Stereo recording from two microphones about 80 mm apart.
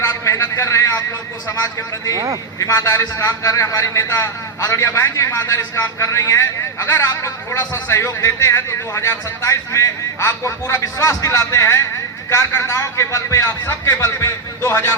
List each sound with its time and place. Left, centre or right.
0.0 s a sound: left
2.1 s speech: right
2.6 s a man's voice: left